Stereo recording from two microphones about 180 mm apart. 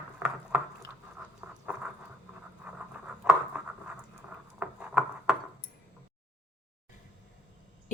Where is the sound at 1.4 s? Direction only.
5° right (ahead or behind).